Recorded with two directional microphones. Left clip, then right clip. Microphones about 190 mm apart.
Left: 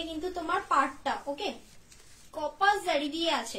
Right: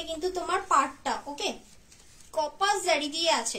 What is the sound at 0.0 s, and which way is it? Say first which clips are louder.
A child's voice: right 3 dB; 40° right (ahead or behind).